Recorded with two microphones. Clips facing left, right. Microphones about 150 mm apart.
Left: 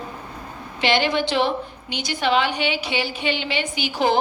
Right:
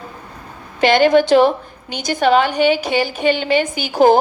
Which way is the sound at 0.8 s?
45° right (ahead or behind).